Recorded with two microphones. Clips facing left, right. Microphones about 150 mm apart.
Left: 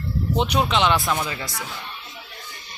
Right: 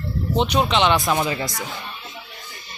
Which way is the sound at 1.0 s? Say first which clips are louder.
Right 3 dB; 20° right (ahead or behind).